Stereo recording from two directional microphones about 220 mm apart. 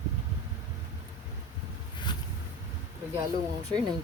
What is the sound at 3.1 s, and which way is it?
Speech, 15° right (ahead or behind).